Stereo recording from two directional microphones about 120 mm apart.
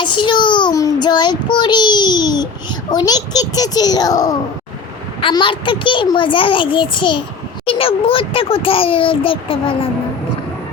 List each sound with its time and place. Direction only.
0.0 s child singing: 40° left (ahead or behind)
2.9 s a child's voice: 35° left (ahead or behind)
5.3 s a child's voice: 40° left (ahead or behind)